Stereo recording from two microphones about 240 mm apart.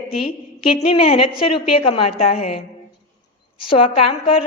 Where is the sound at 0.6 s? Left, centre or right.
Left.